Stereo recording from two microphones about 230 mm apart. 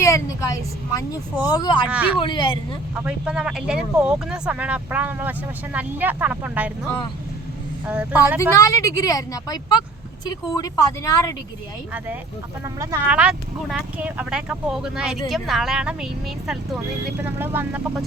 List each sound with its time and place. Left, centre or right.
0.0 s a woman's voice: centre
1.9 s speech: centre
2.1 s speech: left
3.0 s speech: centre
7.9 s speech: centre
8.4 s a woman's voice: centre
12.6 s speech: centre